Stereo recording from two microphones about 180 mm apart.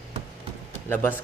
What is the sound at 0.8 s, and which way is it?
Speech, 10° left (ahead or behind).